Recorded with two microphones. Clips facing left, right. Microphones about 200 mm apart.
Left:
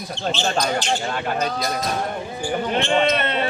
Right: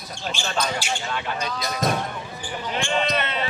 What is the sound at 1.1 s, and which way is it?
Speech, 50° left (ahead or behind).